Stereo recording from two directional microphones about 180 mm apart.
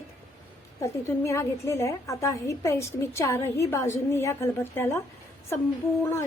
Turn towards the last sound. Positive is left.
turn(degrees=15)  # may be behind; listen again after turning